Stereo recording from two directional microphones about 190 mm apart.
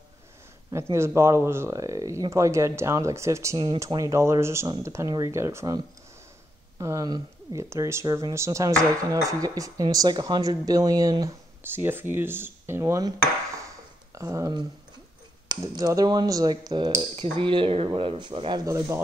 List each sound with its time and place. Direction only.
0.9 s speech: 15° right (ahead or behind)
6.8 s speech: 15° right (ahead or behind)
13.6 s a sound: 15° right (ahead or behind)
15.4 s speech: 20° right (ahead or behind)